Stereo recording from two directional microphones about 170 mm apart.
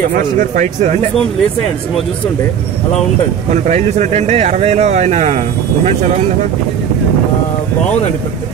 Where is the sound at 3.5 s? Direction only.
45° right (ahead or behind).